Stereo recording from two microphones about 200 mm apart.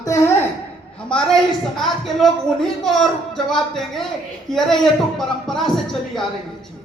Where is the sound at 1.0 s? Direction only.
5° left (ahead or behind).